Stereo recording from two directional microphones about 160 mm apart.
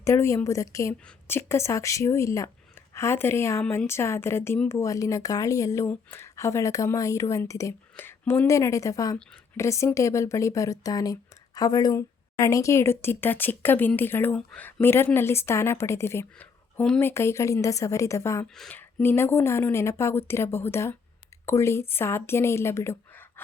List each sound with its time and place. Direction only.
0.0 s speech: 15° left (ahead or behind)
18.4 s speech: 5° left (ahead or behind)